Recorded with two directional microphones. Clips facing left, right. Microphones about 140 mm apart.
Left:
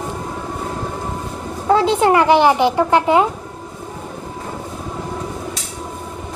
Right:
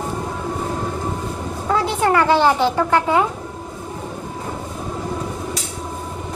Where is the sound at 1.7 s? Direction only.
25° left (ahead or behind).